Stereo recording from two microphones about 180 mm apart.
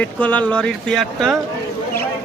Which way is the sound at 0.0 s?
10° left (ahead or behind).